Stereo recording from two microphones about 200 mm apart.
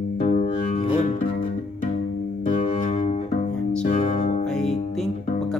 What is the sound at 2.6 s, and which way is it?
Music, 35° left (ahead or behind).